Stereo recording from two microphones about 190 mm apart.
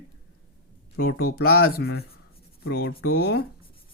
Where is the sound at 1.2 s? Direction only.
55° left (ahead or behind).